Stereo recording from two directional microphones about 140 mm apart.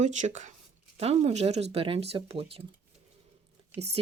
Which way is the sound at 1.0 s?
45° right (ahead or behind).